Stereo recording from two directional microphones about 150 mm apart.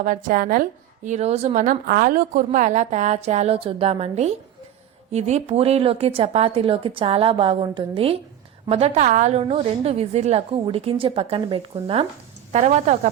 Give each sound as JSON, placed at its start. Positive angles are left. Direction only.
{"t": 0.0, "sound": "a woman's voice", "side_deg": -65}
{"t": 1.6, "sound": "a woman's voice", "side_deg": -80}
{"t": 12.5, "sound": "a woman's voice", "side_deg": -50}